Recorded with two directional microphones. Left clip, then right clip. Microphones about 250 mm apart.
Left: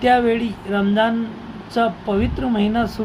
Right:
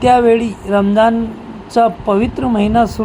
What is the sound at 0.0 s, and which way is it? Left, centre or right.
Speech, centre.